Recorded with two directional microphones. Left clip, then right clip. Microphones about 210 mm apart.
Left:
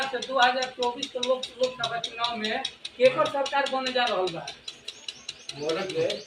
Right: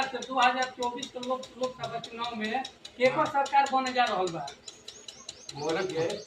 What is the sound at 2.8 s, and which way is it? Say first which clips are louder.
Speech: left 4 dB; 60° right (ahead or behind).